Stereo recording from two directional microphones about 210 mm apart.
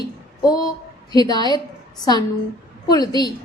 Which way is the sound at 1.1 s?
20° left (ahead or behind).